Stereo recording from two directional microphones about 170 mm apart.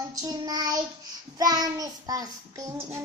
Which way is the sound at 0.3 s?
25° right (ahead or behind).